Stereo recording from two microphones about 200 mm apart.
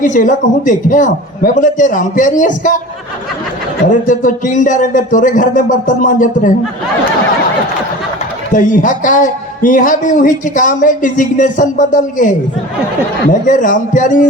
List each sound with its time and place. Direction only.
0.0 s a man's voice: 40° left (ahead or behind)
3.8 s a man's voice: 40° left (ahead or behind)
8.5 s a man's voice: 40° left (ahead or behind)